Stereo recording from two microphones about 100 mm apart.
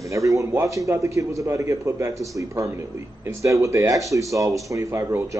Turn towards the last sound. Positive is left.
turn(degrees=-30)  # may be behind; listen again after turning